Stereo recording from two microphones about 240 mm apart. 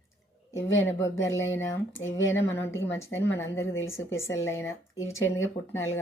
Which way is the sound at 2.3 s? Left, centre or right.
Centre.